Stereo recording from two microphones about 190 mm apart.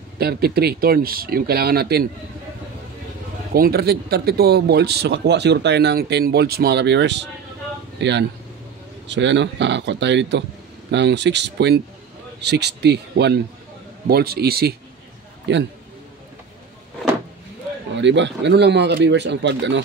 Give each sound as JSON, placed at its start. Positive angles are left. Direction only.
{"t": 0.2, "sound": "speech", "side_deg": -55}
{"t": 3.5, "sound": "speech", "side_deg": -55}
{"t": 15.5, "sound": "speech", "side_deg": -70}
{"t": 17.9, "sound": "speech", "side_deg": -70}